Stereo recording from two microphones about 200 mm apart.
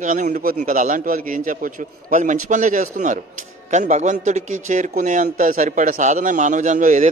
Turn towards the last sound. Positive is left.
turn(degrees=-40)  # may be behind; listen again after turning